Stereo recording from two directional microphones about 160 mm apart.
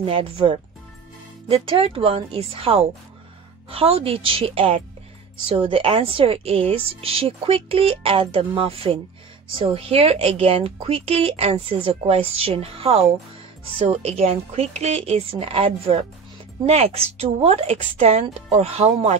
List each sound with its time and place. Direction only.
0.0 s a woman's voice: 35° right (ahead or behind)